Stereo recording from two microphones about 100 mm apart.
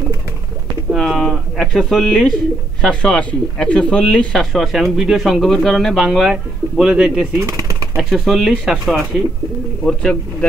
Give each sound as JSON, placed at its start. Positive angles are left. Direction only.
{"t": 0.9, "sound": "a sound", "side_deg": 5}
{"t": 2.8, "sound": "speech", "side_deg": 10}
{"t": 6.0, "sound": "speech", "side_deg": -10}
{"t": 7.4, "sound": "chopping", "side_deg": -35}
{"t": 7.9, "sound": "speech", "side_deg": -5}